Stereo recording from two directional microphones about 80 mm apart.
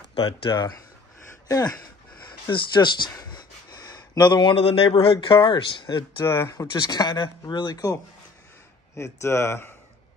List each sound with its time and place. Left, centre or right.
0.1 s speech: left
2.5 s speech: left
3.2 s speech: left
6.1 s speech: left
6.7 s speech: left
8.9 s speech: left